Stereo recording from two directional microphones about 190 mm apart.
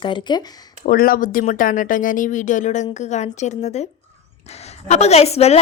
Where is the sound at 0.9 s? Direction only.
50° left (ahead or behind).